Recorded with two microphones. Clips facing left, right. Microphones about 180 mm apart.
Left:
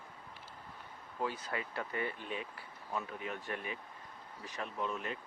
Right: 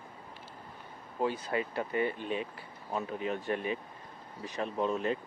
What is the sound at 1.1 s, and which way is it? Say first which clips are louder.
Speech: right 7 dB; 25° right (ahead or behind).